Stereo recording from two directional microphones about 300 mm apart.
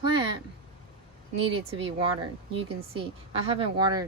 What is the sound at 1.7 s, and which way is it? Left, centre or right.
A woman's voice, centre.